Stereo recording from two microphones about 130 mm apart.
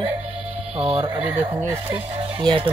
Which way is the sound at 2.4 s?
40° right (ahead or behind).